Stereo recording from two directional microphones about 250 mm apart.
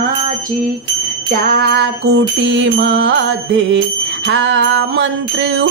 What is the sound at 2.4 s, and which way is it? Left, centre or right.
Music, right.